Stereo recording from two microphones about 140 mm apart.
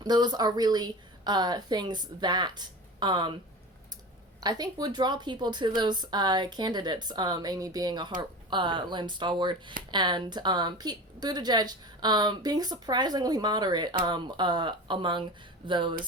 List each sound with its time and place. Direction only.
0.0 s a woman's voice: 30° right (ahead or behind)
4.4 s a woman's voice: 30° right (ahead or behind)